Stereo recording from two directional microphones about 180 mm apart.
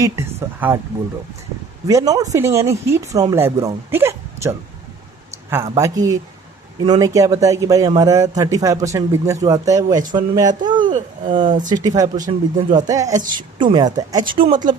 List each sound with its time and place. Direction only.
0.0 s speech: 15° right (ahead or behind)
1.9 s speech: 20° right (ahead or behind)
5.7 s a man's voice: 20° right (ahead or behind)
11.4 s speech: 45° right (ahead or behind)
11.7 s a man's voice: 20° right (ahead or behind)